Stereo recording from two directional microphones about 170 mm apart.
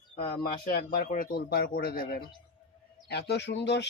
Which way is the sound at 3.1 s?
75° left (ahead or behind).